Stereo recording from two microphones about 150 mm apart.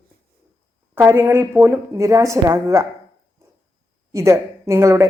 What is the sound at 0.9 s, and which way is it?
A woman's voice, 15° right (ahead or behind).